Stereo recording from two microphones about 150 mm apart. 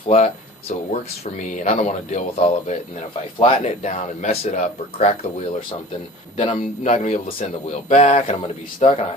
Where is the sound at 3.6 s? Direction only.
50° left (ahead or behind).